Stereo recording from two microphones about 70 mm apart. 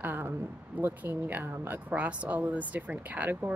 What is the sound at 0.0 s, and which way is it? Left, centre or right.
Speech, right.